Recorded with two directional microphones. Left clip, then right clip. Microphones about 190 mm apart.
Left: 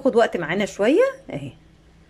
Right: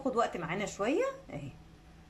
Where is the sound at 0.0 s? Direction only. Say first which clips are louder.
Left 13 dB; 45° left (ahead or behind).